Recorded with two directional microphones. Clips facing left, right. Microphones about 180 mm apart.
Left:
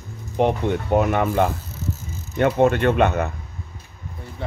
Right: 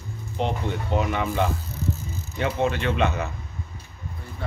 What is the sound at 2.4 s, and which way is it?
Speech, 55° left (ahead or behind).